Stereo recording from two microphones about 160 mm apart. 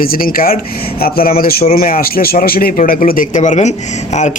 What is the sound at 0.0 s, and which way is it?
Speech, 65° left (ahead or behind).